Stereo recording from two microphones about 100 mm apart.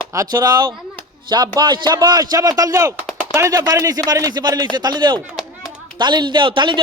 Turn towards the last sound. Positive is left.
turn(degrees=-50)  # may be behind; listen again after turning